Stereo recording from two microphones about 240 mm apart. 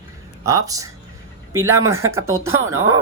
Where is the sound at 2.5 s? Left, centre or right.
Centre.